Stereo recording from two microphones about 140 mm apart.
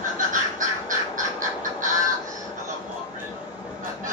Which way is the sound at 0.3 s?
65° right (ahead or behind).